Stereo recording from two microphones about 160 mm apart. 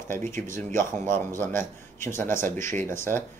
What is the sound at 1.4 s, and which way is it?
Speech, 15° left (ahead or behind).